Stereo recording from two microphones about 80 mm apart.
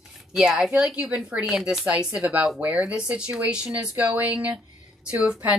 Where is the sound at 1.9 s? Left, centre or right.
Centre.